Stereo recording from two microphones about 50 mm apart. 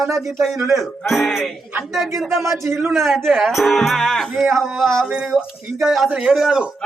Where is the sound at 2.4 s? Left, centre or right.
Right.